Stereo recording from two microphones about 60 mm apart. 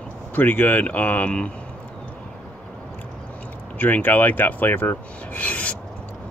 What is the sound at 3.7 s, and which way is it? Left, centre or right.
Rub, left.